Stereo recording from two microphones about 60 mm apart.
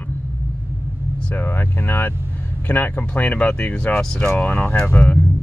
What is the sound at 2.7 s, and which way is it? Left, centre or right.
Speech, left.